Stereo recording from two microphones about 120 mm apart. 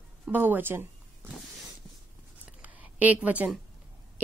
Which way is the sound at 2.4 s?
10° right (ahead or behind).